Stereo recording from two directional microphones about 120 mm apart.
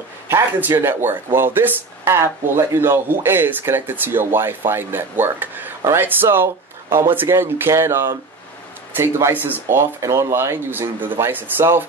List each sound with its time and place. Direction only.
0.3 s speech: 20° right (ahead or behind)